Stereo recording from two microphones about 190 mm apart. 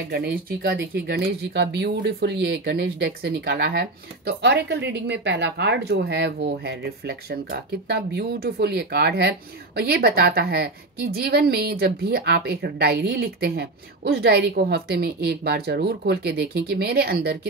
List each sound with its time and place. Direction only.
0.1 s a woman's voice: 55° right (ahead or behind)